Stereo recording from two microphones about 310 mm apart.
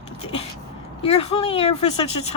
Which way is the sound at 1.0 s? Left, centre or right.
Centre.